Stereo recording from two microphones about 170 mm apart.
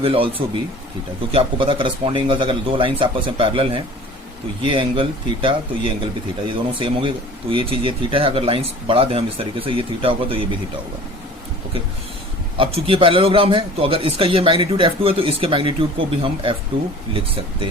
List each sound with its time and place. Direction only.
0.0 s a man's voice: 35° right (ahead or behind)
12.5 s a man's voice: 30° right (ahead or behind)